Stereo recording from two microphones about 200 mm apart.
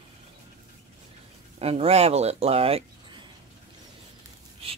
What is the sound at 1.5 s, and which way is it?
Speech, 30° right (ahead or behind).